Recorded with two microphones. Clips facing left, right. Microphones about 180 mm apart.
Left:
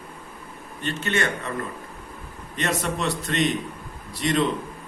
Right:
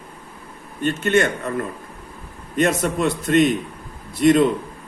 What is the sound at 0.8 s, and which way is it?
Speech, 50° right (ahead or behind).